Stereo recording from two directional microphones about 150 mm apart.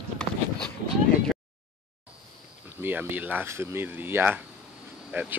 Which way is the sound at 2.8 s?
15° right (ahead or behind).